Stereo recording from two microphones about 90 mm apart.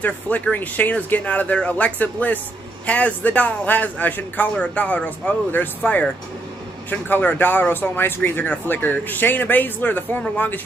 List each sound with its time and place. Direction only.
0.0 s a man's voice: 20° left (ahead or behind)